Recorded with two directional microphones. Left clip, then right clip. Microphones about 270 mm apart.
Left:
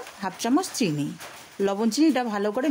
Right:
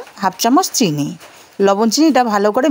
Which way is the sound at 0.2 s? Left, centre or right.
Right.